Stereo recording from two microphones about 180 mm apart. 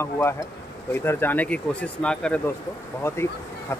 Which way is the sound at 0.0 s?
15° left (ahead or behind).